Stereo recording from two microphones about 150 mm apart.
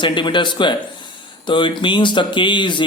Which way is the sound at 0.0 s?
30° left (ahead or behind).